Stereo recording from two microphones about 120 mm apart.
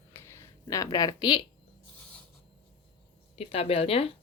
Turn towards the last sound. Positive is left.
turn(degrees=55)  # may be behind; listen again after turning